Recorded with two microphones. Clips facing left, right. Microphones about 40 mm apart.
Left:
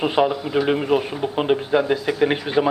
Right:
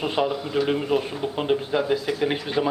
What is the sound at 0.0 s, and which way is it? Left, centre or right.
A man's voice, centre.